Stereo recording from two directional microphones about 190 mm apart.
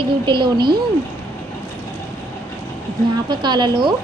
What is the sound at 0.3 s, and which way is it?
Speech, 25° right (ahead or behind).